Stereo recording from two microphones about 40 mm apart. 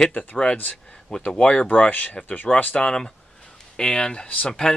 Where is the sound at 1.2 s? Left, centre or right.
Left.